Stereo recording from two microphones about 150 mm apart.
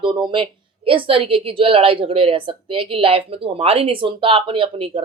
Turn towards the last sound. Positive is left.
turn(degrees=-35)  # may be behind; listen again after turning